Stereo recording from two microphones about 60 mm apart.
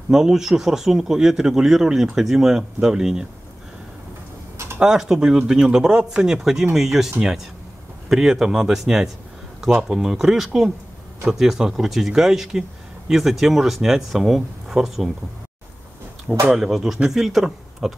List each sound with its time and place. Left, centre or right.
0.1 s speech: centre
4.7 s speech: centre
8.1 s speech: centre
16.4 s speech: centre